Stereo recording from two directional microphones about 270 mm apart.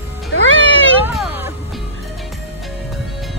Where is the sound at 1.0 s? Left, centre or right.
Centre.